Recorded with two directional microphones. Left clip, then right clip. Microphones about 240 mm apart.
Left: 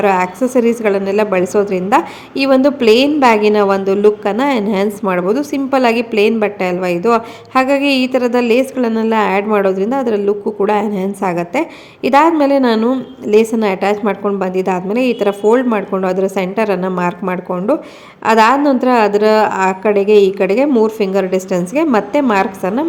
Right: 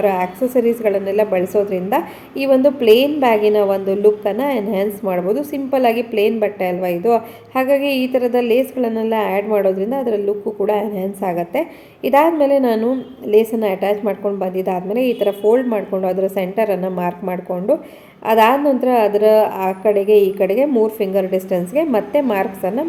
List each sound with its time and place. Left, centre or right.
0.0 s a woman's voice: left